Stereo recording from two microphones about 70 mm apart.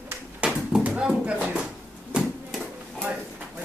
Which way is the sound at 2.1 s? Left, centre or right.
Centre.